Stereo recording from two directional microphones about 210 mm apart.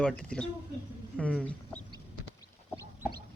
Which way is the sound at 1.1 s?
5° left (ahead or behind).